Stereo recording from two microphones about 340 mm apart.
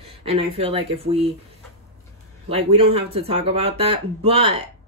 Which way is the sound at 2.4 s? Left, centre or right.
Centre.